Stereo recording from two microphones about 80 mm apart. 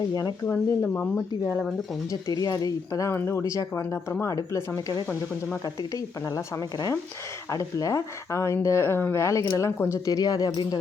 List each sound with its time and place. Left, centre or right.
0.1 s speech: left
0.4 s speech: left
2.2 s speech: left
3.2 s speech: left
6.3 s speech: left
10.1 s speech: left